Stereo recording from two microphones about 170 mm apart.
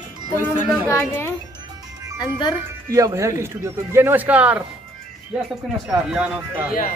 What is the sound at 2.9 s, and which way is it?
Speech, 20° right (ahead or behind).